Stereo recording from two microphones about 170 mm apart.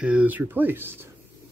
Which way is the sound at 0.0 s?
10° right (ahead or behind).